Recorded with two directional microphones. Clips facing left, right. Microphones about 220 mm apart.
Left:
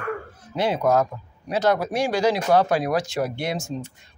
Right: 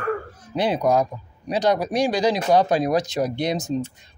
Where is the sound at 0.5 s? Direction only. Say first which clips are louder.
Right 1 dB; 15° right (ahead or behind).